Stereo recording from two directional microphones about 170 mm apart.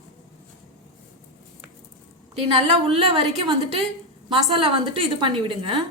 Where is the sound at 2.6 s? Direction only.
35° right (ahead or behind).